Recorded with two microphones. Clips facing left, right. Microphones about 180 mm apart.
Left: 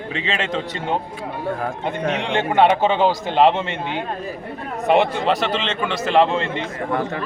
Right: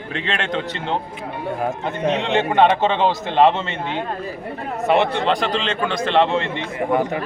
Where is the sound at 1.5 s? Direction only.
20° right (ahead or behind).